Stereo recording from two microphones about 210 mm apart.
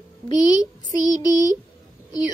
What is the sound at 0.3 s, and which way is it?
Speech, 20° left (ahead or behind).